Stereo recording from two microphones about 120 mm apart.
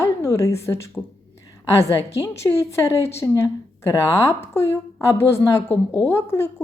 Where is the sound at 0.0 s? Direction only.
25° left (ahead or behind).